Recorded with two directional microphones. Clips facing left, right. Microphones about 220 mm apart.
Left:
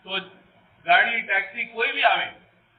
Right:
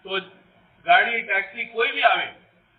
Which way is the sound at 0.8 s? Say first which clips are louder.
Right 2 dB; 45° right (ahead or behind).